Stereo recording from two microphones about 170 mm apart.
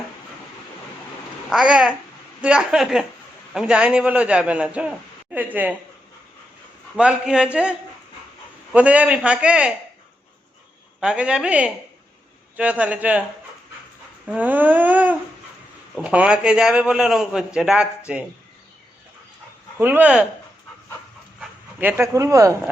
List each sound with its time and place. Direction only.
1.5 s a man's voice: 5° right (ahead or behind)
6.9 s a man's voice: 5° right (ahead or behind)
11.0 s a man's voice: 5° right (ahead or behind)
14.3 s a man's voice: 10° right (ahead or behind)
19.8 s a man's voice: 10° right (ahead or behind)
21.8 s a man's voice: 10° right (ahead or behind)